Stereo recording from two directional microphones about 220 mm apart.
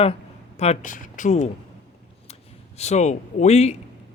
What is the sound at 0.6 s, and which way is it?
Speech, 30° left (ahead or behind).